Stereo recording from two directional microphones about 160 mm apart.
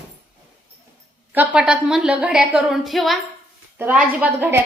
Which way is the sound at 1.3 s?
5° right (ahead or behind).